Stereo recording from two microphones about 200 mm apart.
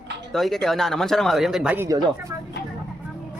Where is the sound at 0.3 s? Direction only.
Centre (ahead or behind).